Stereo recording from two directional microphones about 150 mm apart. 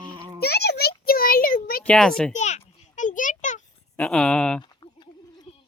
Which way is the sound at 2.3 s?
50° left (ahead or behind).